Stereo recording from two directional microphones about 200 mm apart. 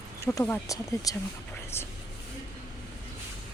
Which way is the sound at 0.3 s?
10° left (ahead or behind).